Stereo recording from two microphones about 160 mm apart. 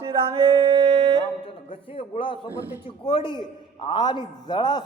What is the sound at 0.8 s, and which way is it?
Music, 40° right (ahead or behind).